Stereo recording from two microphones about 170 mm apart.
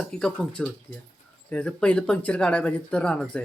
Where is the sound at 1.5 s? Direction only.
5° left (ahead or behind).